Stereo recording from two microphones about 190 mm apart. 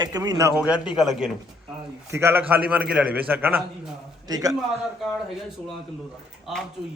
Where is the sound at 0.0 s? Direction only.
20° right (ahead or behind).